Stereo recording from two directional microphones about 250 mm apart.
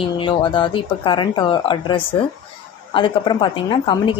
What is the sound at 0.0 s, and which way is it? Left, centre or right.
Speech, centre.